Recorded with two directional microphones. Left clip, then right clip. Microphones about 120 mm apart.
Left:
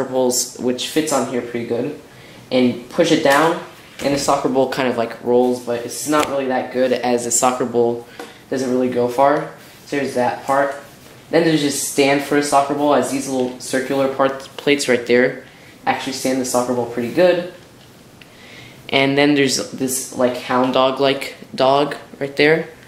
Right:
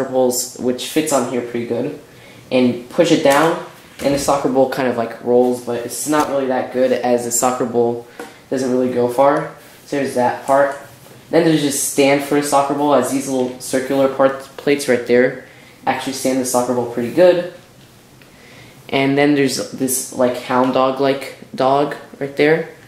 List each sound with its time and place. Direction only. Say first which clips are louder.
0.1 s speech: right 2 dB; 15° left (ahead or behind)
11.3 s speech: right 1 dB; 10° left (ahead or behind)
18.9 s speech: even; 15° left (ahead or behind)